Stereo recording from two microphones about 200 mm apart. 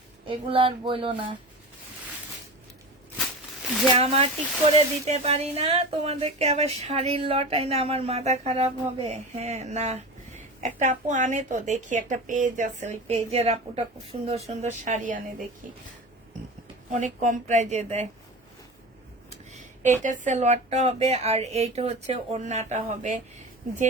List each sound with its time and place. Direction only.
0.3 s speech: 25° right (ahead or behind)
3.9 s speech: 30° right (ahead or behind)
16.9 s speech: 40° right (ahead or behind)
19.8 s speech: 40° right (ahead or behind)